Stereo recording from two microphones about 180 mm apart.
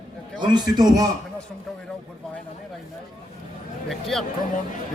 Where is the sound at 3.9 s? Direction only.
Centre (ahead or behind).